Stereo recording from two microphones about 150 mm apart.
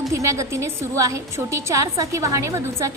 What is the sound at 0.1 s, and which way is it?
A woman's voice, 20° right (ahead or behind).